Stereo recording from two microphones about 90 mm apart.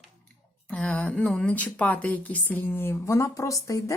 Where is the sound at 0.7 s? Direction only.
10° left (ahead or behind).